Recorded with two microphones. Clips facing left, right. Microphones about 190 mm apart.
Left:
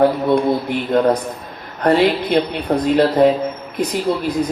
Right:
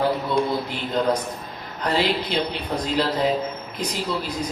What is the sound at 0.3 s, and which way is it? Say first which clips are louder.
Speech: left 7 dB; 55° left (ahead or behind).